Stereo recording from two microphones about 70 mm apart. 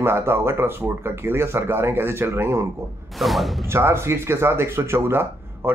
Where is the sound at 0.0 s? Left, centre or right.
Right.